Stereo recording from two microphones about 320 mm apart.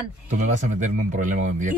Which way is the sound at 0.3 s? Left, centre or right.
Right.